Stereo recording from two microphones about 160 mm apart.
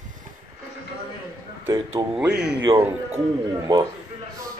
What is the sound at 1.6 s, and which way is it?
Speech, 20° right (ahead or behind).